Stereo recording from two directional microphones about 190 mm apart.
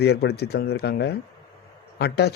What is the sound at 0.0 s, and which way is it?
A man's voice, 60° left (ahead or behind).